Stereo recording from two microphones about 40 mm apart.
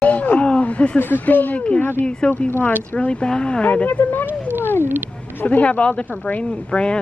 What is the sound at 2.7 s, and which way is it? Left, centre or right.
Speech, left.